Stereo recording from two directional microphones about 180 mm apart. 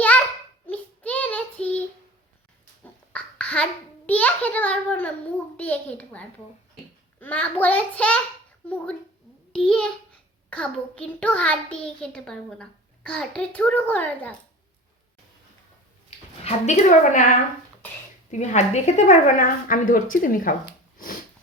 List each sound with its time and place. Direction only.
0.7 s child singing: 10° left (ahead or behind)
2.8 s a sound: 5° left (ahead or behind)
5.5 s a child's voice: 10° left (ahead or behind)
16.0 s speech: 35° left (ahead or behind)
18.3 s speech: 40° left (ahead or behind)